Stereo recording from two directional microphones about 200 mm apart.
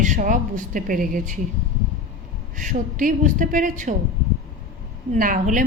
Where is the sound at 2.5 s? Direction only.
40° right (ahead or behind).